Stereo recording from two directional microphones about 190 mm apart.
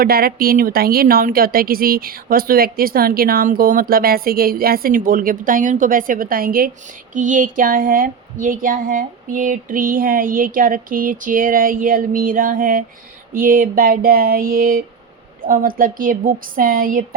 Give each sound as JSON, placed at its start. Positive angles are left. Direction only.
{"t": 0.0, "sound": "speech", "side_deg": -50}